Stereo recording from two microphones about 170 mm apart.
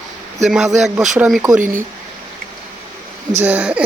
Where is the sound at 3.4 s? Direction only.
10° right (ahead or behind).